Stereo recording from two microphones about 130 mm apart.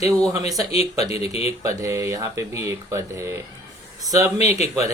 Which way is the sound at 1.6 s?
25° right (ahead or behind).